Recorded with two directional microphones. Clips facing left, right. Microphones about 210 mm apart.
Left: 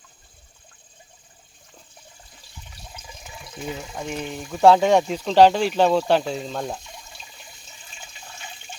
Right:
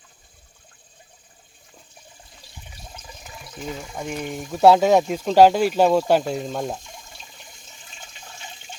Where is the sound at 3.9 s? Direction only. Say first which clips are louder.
Right 4 dB; centre (ahead or behind).